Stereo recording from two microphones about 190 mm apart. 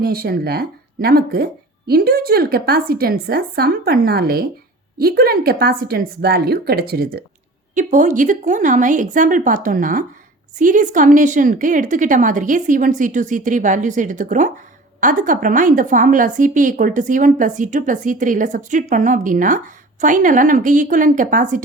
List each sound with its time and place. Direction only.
0.0 s a woman's voice: 55° right (ahead or behind)
7.8 s a woman's voice: 40° right (ahead or behind)